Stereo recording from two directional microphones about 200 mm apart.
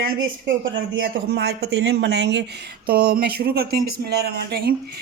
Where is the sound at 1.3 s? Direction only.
55° right (ahead or behind).